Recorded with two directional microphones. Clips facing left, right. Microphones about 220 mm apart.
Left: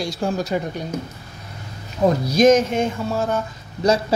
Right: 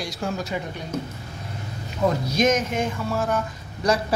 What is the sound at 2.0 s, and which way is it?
Speech, 35° left (ahead or behind).